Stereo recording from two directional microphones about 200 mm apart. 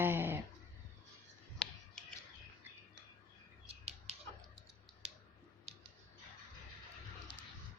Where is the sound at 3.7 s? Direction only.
30° right (ahead or behind).